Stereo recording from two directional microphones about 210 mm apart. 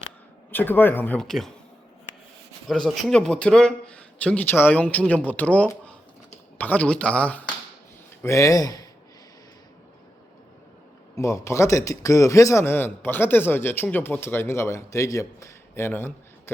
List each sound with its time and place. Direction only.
0.5 s a man's voice: 10° left (ahead or behind)
2.6 s a man's voice: centre (ahead or behind); by 8.9 s 15° left (ahead or behind)
11.2 s a man's voice: 15° left (ahead or behind)